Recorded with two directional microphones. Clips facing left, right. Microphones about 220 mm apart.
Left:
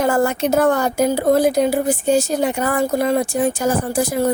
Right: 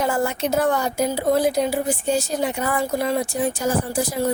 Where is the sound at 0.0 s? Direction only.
45° left (ahead or behind).